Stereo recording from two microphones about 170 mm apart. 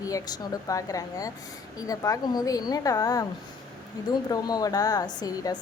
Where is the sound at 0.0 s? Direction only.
20° left (ahead or behind).